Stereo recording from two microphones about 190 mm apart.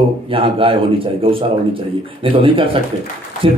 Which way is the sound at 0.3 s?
30° right (ahead or behind).